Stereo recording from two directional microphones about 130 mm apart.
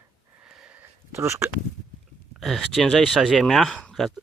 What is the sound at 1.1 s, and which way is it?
Speech, 20° right (ahead or behind).